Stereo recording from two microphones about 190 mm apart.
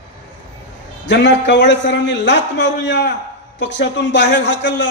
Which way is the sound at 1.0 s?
70° left (ahead or behind).